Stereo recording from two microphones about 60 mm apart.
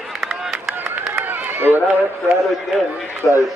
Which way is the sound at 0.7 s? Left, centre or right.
Right.